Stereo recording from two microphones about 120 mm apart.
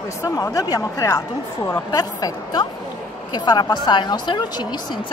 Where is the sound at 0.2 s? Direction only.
30° left (ahead or behind).